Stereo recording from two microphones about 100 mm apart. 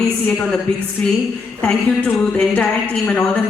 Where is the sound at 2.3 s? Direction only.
15° left (ahead or behind).